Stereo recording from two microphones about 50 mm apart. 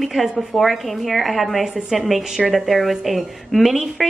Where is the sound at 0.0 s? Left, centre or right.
Centre.